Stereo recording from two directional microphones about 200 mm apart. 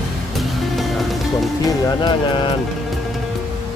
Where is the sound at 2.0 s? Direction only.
20° left (ahead or behind).